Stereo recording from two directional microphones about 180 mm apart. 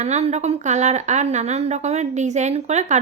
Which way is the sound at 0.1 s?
35° right (ahead or behind).